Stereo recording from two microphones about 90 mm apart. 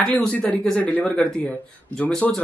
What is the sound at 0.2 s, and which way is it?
Speech, 15° left (ahead or behind).